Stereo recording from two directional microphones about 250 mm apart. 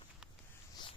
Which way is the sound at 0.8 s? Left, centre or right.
Centre.